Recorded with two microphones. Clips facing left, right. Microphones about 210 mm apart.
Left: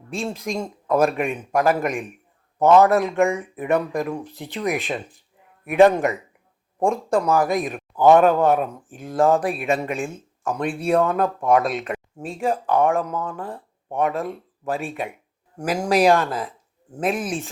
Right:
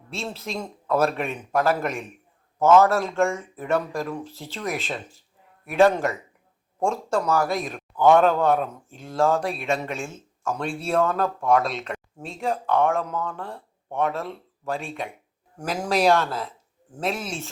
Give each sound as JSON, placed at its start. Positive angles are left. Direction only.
{"t": 0.1, "sound": "speech", "side_deg": 15}
{"t": 9.4, "sound": "speech", "side_deg": 0}
{"t": 10.0, "sound": "speech", "side_deg": 15}
{"t": 11.9, "sound": "speech", "side_deg": 0}
{"t": 13.1, "sound": "speech", "side_deg": 15}
{"t": 15.5, "sound": "speech", "side_deg": 10}
{"t": 17.0, "sound": "speech", "side_deg": 15}